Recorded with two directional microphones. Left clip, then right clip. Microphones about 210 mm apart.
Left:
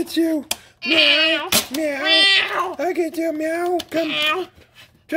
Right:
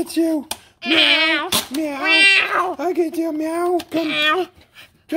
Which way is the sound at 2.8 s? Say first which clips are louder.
Right 1 dB; 5° right (ahead or behind).